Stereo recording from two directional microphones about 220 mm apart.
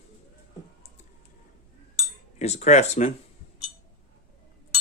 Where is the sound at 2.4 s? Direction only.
30° left (ahead or behind).